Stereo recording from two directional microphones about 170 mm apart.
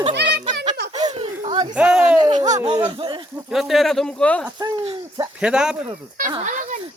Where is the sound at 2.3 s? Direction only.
45° right (ahead or behind).